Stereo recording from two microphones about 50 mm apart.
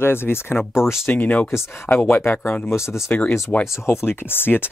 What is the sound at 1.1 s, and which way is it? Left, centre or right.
Speech, left.